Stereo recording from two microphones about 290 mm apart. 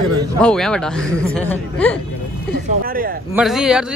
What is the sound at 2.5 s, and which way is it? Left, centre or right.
Speech, right.